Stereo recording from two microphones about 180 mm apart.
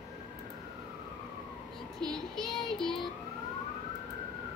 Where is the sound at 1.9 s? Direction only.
5° left (ahead or behind).